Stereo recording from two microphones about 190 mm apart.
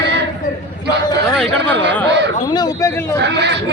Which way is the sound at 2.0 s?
65° right (ahead or behind).